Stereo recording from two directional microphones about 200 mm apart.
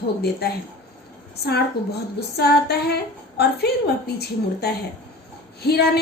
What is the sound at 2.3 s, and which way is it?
A woman's voice, 55° left (ahead or behind).